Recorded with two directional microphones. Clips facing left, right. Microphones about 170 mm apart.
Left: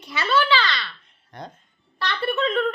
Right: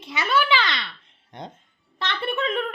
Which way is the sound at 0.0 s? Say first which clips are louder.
Left 1 dB; 20° right (ahead or behind).